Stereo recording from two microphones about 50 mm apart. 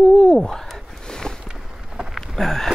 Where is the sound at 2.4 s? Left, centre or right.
Centre.